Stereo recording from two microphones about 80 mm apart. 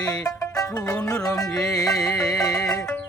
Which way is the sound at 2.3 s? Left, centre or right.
Left.